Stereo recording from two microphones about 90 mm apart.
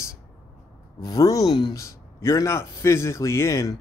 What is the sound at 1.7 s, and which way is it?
A man's voice, 35° left (ahead or behind).